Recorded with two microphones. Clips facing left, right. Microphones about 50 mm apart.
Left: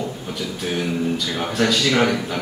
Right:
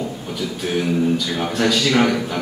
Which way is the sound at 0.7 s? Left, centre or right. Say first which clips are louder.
Right 4 dB; centre.